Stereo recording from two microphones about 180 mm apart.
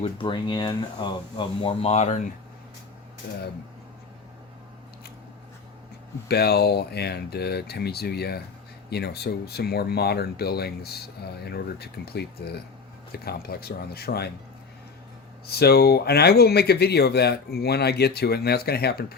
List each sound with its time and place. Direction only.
0.0 s speech: 25° left (ahead or behind)
6.2 s speech: 60° left (ahead or behind)
15.4 s speech: 60° left (ahead or behind)